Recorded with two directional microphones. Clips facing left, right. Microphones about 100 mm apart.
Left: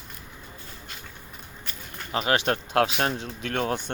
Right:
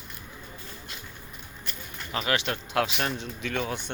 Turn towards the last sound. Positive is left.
turn(degrees=45)  # may be behind; listen again after turning